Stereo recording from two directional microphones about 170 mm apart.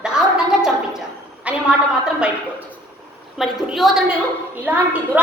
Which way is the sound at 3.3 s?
Centre (ahead or behind).